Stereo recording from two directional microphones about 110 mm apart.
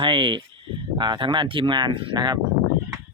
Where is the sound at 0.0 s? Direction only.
50° right (ahead or behind).